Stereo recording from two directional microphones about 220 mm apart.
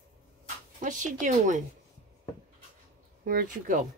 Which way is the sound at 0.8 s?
35° right (ahead or behind).